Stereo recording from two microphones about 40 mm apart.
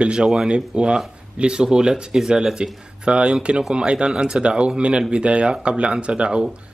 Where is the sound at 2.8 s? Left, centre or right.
Right.